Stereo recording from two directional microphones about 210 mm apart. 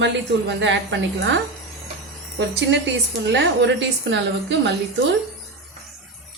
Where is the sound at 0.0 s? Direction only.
60° right (ahead or behind).